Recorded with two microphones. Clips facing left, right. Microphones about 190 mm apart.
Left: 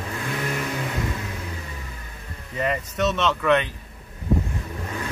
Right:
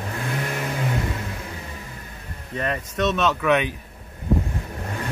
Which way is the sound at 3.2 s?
5° right (ahead or behind).